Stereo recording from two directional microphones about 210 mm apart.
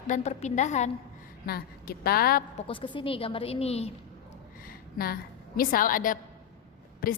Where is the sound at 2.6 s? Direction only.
25° left (ahead or behind).